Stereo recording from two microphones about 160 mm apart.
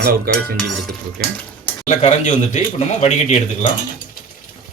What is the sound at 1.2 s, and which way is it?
Cutlery, 70° right (ahead or behind).